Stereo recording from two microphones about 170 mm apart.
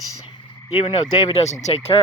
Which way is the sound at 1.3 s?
40° left (ahead or behind).